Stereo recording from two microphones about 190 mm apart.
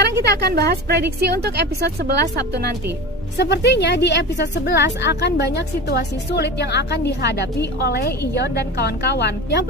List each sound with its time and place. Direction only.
0.0 s a woman's voice: 60° right (ahead or behind)
3.3 s a woman's voice: 65° left (ahead or behind)